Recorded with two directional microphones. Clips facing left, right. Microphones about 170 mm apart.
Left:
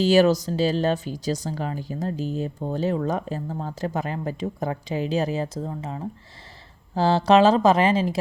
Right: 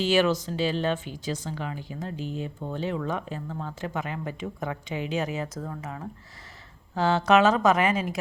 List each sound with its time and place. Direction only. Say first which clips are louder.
0.0 s speech: left 5 dB; 40° left (ahead or behind)